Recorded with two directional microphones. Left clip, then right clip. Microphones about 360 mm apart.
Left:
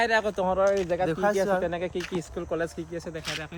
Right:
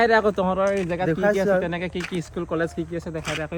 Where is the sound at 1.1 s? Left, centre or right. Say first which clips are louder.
Right 7 dB; centre.